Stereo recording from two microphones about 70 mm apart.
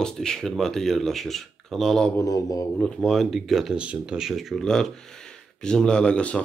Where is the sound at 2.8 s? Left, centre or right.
Centre.